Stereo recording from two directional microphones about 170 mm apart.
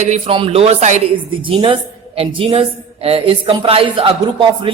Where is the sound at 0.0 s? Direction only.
35° right (ahead or behind).